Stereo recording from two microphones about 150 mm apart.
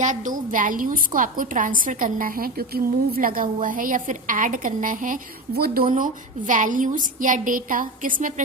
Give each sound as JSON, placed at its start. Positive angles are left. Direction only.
{"t": 0.0, "sound": "a woman's voice", "side_deg": -55}